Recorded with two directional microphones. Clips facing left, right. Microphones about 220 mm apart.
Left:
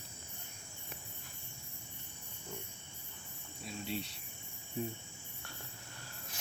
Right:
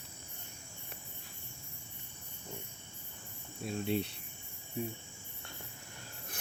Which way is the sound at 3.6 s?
55° right (ahead or behind).